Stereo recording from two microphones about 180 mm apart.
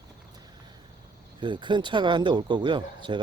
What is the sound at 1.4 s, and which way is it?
Speech, 25° right (ahead or behind).